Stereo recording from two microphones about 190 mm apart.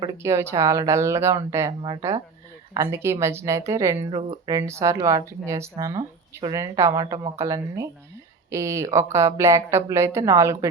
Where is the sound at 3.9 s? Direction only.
35° right (ahead or behind).